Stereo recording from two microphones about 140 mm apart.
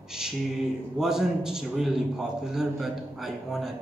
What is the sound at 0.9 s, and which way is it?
A man's voice, 5° right (ahead or behind).